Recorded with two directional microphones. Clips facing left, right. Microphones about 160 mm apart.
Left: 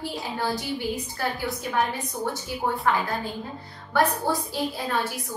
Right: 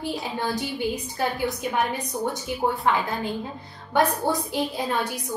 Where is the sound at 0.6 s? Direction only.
20° right (ahead or behind).